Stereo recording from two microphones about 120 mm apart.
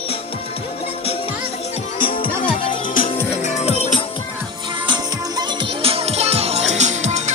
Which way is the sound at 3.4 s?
65° left (ahead or behind).